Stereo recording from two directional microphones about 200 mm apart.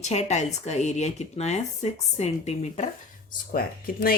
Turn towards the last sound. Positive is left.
turn(degrees=45)  # may be behind; listen again after turning